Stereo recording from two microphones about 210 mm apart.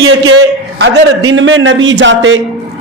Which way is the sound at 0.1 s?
65° right (ahead or behind).